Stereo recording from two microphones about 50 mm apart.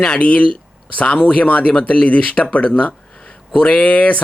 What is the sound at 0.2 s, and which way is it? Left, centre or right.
Speech, left.